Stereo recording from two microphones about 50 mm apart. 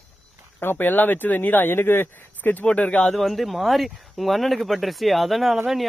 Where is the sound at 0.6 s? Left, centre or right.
Left.